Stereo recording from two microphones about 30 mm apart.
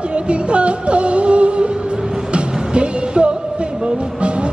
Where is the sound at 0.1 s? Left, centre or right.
Right.